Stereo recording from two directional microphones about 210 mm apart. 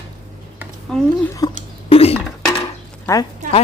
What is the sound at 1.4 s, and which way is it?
Speech, 15° left (ahead or behind).